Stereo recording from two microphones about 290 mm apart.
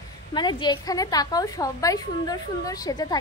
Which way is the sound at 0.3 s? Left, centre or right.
Centre.